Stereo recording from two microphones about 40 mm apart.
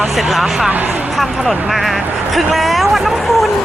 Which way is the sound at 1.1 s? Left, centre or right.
Centre.